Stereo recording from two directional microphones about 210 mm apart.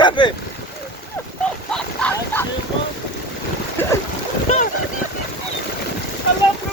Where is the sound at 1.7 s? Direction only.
5° left (ahead or behind).